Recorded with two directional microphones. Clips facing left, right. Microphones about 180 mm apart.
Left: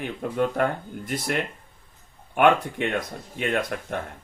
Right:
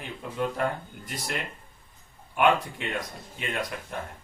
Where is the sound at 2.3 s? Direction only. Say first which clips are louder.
Left 4 dB; 60° left (ahead or behind).